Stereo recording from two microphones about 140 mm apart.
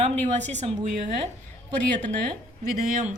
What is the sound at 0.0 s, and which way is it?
Speech, 55° right (ahead or behind).